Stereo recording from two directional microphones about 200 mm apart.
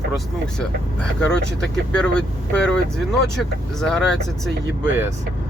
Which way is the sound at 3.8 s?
Centre (ahead or behind).